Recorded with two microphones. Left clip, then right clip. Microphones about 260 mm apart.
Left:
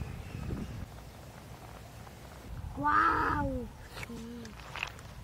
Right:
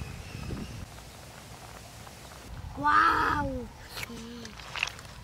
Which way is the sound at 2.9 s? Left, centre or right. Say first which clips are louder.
Right 4 dB; centre.